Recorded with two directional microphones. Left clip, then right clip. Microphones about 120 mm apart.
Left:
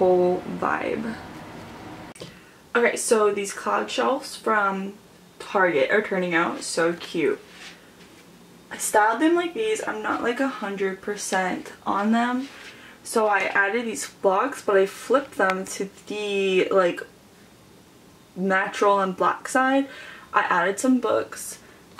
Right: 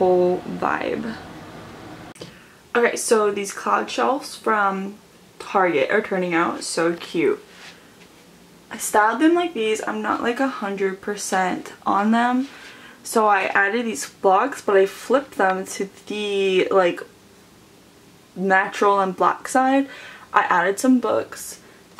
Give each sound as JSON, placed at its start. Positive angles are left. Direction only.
{"t": 0.6, "sound": "speech", "side_deg": -5}
{"t": 2.7, "sound": "speech", "side_deg": -15}
{"t": 7.1, "sound": "speech", "side_deg": -30}
{"t": 8.9, "sound": "speech", "side_deg": -15}
{"t": 18.4, "sound": "speech", "side_deg": -20}